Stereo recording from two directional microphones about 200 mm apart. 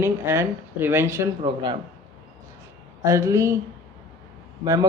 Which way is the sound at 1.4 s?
25° right (ahead or behind).